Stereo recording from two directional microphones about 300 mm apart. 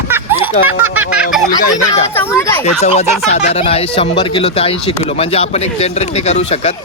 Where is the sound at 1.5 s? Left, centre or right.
Centre.